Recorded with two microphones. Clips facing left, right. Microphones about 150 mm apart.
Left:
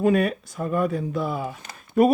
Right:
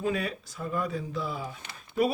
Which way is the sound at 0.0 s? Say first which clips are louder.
Left 10 dB; 55° left (ahead or behind).